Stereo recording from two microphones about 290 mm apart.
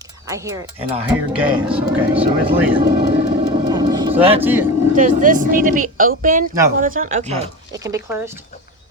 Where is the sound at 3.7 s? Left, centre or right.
Centre.